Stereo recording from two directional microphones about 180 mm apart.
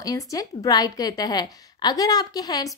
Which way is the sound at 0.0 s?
20° left (ahead or behind).